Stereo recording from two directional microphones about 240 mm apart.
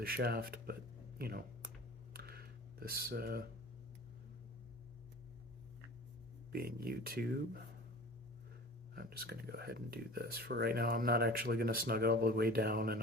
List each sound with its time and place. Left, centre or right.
0.0 s speech: right
2.1 s a sound: right
6.5 s speech: right
9.0 s speech: right